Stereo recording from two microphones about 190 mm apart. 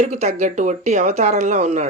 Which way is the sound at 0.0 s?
35° right (ahead or behind).